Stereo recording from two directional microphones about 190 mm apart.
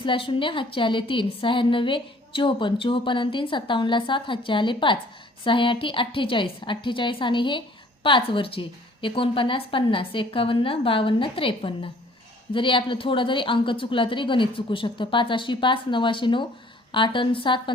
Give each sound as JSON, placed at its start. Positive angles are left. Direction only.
{"t": 0.0, "sound": "a woman's voice", "side_deg": 25}